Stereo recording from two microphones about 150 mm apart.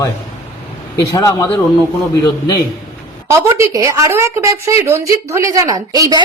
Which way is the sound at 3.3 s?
20° right (ahead or behind).